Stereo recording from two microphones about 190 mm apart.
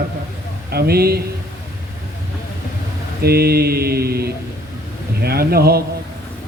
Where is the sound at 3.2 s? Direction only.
55° right (ahead or behind).